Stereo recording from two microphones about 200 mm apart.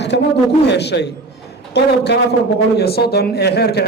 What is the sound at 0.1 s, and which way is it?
Speech, 60° left (ahead or behind).